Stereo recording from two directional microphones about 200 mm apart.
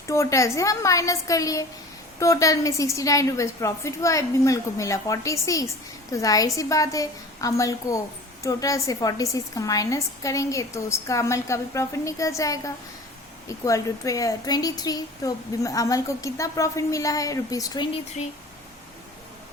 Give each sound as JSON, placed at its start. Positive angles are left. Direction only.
{"t": 0.1, "sound": "a woman's voice", "side_deg": 15}